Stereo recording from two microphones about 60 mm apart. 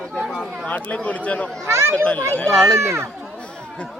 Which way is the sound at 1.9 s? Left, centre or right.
Left.